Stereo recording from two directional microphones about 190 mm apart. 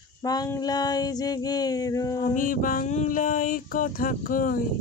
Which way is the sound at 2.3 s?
45° left (ahead or behind).